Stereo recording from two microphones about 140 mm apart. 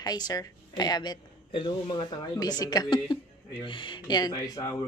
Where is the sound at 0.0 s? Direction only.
25° left (ahead or behind).